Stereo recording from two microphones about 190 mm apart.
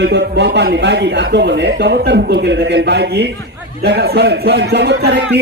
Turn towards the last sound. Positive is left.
turn(degrees=-65)  # may be behind; listen again after turning